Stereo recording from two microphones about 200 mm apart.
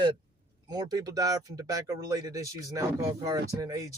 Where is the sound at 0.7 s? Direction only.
20° right (ahead or behind).